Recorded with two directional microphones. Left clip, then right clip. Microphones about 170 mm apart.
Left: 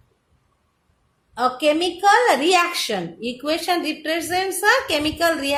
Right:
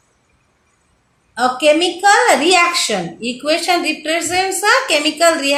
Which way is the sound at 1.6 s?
50° left (ahead or behind).